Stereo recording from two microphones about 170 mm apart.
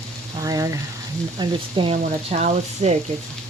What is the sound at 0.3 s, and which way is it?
Frying, 20° right (ahead or behind).